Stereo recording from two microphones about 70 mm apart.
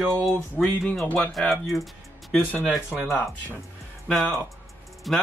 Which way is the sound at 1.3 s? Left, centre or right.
Centre.